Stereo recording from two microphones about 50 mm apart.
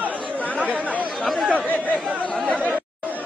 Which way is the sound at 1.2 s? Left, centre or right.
Centre.